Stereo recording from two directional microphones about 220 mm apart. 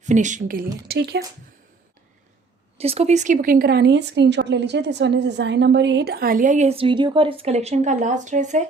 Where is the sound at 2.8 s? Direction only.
25° right (ahead or behind).